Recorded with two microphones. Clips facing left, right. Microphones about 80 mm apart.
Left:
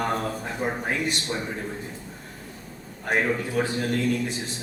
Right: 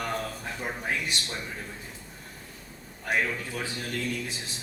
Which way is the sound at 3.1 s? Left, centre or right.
Left.